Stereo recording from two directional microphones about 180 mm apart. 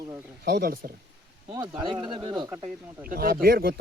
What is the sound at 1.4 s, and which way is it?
Speech, 20° right (ahead or behind).